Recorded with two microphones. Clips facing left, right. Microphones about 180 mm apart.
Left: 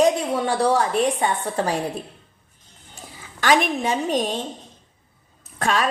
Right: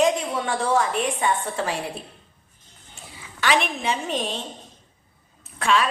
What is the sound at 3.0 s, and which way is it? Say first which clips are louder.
A woman's voice: left 1 dB; 40° left (ahead or behind).